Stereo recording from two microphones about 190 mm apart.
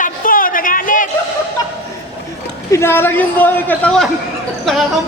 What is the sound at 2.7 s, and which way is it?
A man's voice, 10° left (ahead or behind).